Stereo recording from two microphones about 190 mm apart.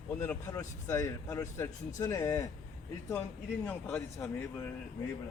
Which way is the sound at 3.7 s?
5° left (ahead or behind).